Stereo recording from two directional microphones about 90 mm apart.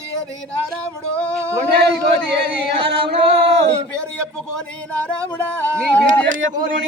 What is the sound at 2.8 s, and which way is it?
Speech, 80° right.